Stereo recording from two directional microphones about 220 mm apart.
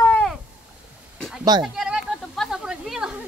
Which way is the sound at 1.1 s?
Centre (ahead or behind).